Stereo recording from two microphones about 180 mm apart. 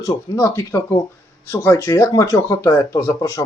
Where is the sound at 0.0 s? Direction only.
15° left (ahead or behind).